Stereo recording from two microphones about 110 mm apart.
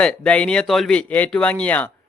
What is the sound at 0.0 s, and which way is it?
Speech, 10° left (ahead or behind).